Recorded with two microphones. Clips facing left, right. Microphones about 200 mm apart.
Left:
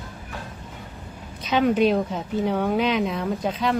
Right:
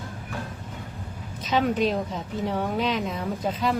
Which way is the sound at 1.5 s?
Centre (ahead or behind).